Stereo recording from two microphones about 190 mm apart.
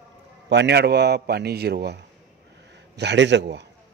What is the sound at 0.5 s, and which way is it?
A man's voice, 65° right (ahead or behind).